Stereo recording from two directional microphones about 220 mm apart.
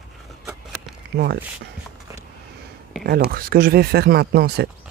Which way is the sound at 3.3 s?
40° right (ahead or behind).